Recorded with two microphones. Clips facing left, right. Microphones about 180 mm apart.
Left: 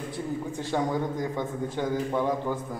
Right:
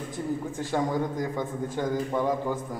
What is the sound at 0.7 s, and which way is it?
Speech, centre (ahead or behind).